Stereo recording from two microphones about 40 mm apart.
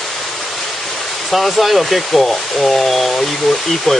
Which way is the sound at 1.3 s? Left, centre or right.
Centre.